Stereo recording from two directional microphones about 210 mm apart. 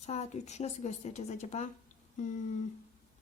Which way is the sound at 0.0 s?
30° left (ahead or behind).